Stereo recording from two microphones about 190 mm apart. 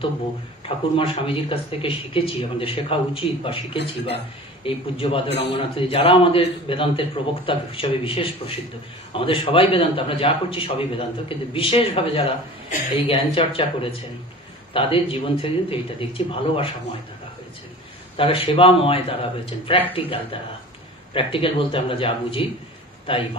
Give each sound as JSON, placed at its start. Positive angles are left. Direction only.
{"t": 0.7, "sound": "a man's voice", "side_deg": 30}
{"t": 18.1, "sound": "a man's voice", "side_deg": 30}